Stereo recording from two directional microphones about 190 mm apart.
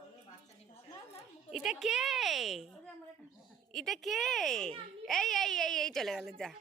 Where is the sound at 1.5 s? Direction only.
Centre (ahead or behind).